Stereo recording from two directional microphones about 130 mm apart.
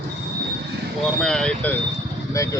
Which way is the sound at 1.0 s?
5° left (ahead or behind).